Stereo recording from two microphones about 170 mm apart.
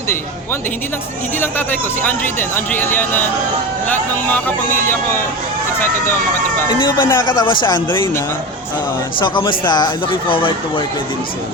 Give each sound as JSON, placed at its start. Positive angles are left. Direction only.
{"t": 1.4, "sound": "speech", "side_deg": 10}
{"t": 4.3, "sound": "speech", "side_deg": 10}
{"t": 6.7, "sound": "speech", "side_deg": 25}
{"t": 9.2, "sound": "speech", "side_deg": 30}